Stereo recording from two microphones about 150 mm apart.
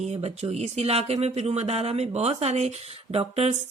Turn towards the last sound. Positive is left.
turn(degrees=-45)  # may be behind; listen again after turning